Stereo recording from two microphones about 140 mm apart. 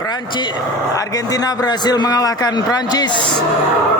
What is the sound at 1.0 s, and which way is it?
A man's voice, 25° left (ahead or behind).